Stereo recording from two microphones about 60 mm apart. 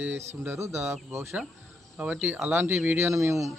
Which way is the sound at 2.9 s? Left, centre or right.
Right.